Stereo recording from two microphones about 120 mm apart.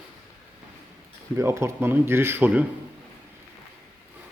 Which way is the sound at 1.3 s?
20° right (ahead or behind).